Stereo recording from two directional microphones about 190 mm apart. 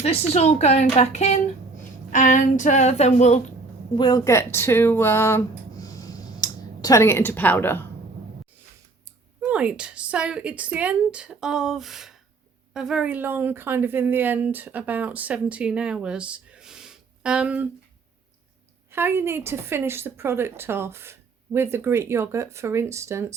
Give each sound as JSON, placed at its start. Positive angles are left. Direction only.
{"t": 0.0, "sound": "a woman's voice", "side_deg": 35}
{"t": 3.9, "sound": "speech", "side_deg": 20}
{"t": 5.8, "sound": "a sound", "side_deg": 20}
{"t": 9.4, "sound": "a woman's voice", "side_deg": -5}
{"t": 18.9, "sound": "a woman's voice", "side_deg": -10}